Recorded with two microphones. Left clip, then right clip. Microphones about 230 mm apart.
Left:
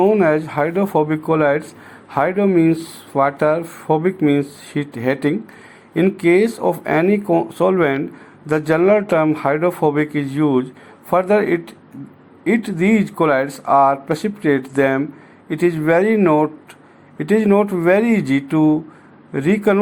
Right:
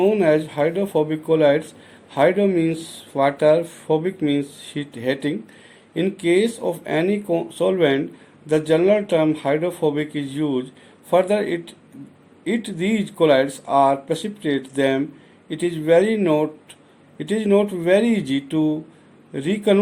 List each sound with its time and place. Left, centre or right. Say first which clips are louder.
0.2 s speech: left 2 dB; left
6.7 s speech: left 5 dB; left